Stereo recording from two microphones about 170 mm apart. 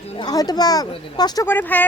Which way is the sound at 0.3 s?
25° left (ahead or behind).